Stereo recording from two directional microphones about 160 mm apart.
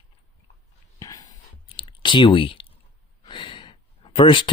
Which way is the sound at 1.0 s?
20° left (ahead or behind).